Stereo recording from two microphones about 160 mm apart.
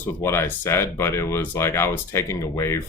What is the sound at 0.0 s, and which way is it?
Speech, 15° left (ahead or behind).